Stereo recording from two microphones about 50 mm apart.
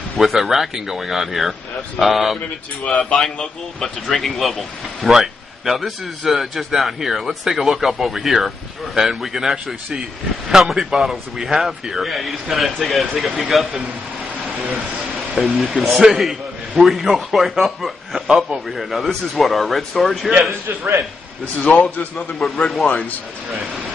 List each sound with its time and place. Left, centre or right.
0.2 s speech: centre
3.2 s speech: centre
15.3 s speech: centre
20.6 s a man's voice: right
21.5 s a man's voice: left
22.4 s speech: centre